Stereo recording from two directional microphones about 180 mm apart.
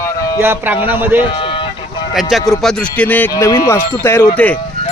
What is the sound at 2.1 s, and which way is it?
Speech, centre (ahead or behind).